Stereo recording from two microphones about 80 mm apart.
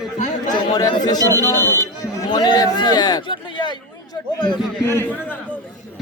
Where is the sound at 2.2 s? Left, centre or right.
Left.